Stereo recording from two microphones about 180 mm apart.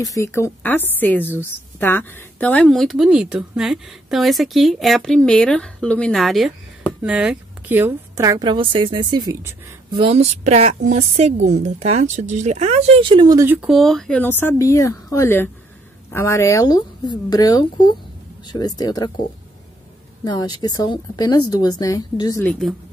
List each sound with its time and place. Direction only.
0.0 s a woman's voice: 15° left (ahead or behind); by 9.6 s 15° right (ahead or behind)
9.8 s speech: 30° right (ahead or behind)
13.5 s speech: 5° right (ahead or behind); by 19.2 s 20° left (ahead or behind)
20.2 s speech: 20° left (ahead or behind)
22.4 s a woman's voice: 5° left (ahead or behind)